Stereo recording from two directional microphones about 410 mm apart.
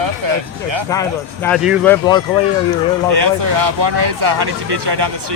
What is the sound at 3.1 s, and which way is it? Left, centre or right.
Speech, right.